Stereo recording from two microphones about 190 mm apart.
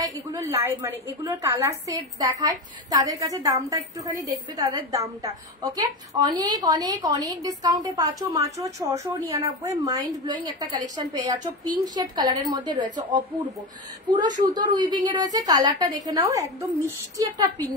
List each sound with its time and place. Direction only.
0.0 s a woman's voice: 20° right (ahead or behind)
14.1 s a woman's voice: 20° right (ahead or behind)